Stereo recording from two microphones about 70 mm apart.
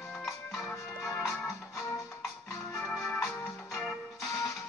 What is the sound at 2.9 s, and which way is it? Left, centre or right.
Organ, left.